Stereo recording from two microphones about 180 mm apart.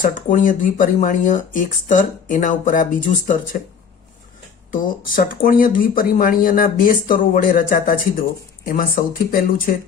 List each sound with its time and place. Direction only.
0.0 s speech: 45° left (ahead or behind)
4.7 s speech: 50° left (ahead or behind)